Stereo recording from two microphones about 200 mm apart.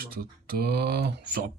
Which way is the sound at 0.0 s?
50° right (ahead or behind).